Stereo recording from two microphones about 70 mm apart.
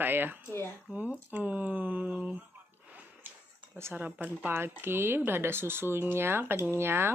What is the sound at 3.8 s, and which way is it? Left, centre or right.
Speech, right.